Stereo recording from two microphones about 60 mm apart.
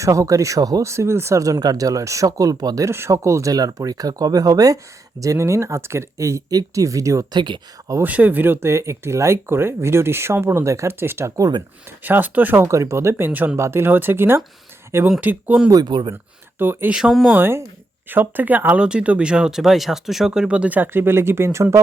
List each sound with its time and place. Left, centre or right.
0.0 s speech: right
0.9 s speech: right
3.1 s speech: right
3.5 s speech: right
5.2 s speech: right
8.0 s speech: right
8.6 s speech: right
11.0 s speech: right
12.6 s speech: right
15.2 s speech: right
16.6 s speech: right
16.9 s speech: centre
17.3 s speech: right
18.8 s speech: centre; by 21.8 s right